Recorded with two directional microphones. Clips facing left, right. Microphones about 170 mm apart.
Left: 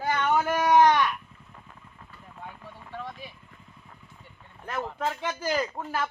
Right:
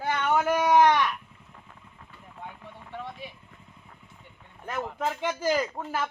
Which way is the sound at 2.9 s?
20° right (ahead or behind).